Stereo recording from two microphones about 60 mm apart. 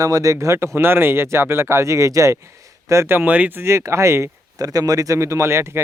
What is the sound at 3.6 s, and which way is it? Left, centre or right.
Speech, right.